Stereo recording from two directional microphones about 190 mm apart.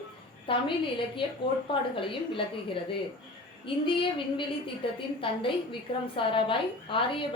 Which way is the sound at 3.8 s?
25° left (ahead or behind).